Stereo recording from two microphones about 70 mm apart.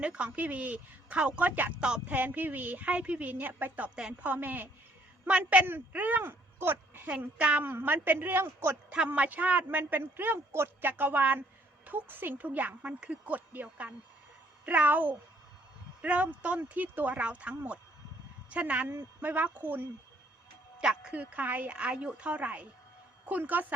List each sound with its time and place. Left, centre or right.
0.0 s speech: centre
1.8 s speech: centre
2.1 s speech: right
4.3 s speech: right
7.1 s speech: centre
7.7 s speech: right
20.8 s speech: centre
21.2 s speech: right